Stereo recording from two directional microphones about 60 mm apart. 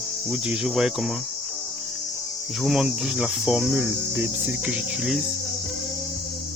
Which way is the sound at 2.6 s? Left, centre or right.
Centre.